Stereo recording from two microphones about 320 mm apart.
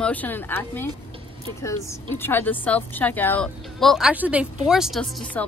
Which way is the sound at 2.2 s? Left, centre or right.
Centre.